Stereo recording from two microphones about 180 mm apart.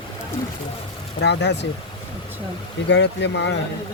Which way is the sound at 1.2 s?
70° left (ahead or behind).